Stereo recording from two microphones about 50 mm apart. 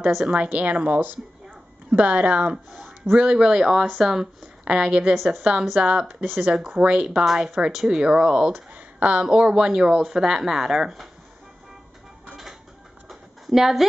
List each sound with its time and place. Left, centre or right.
0.1 s a woman's voice: centre
3.3 s a woman's voice: centre
13.1 s a sound: centre